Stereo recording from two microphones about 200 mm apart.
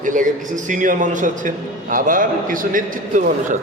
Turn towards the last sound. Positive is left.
turn(degrees=-40)  # may be behind; listen again after turning